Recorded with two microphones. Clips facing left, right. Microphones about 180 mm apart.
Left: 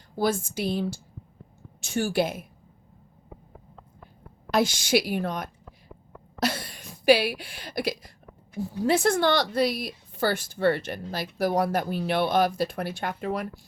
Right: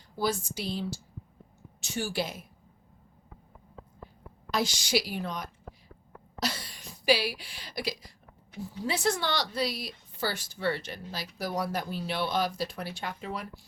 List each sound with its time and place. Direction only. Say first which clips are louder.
0.2 s a woman's voice: left 5 dB; 50° left (ahead or behind)
4.5 s a woman's voice: left 6 dB; 55° left (ahead or behind)